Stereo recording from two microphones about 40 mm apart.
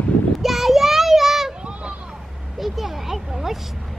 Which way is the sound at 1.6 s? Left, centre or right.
Right.